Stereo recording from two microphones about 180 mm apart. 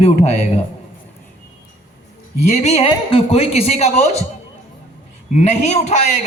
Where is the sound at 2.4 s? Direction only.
40° left (ahead or behind).